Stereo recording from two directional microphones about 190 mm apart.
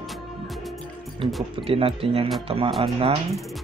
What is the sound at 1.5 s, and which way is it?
Speech, 30° right (ahead or behind).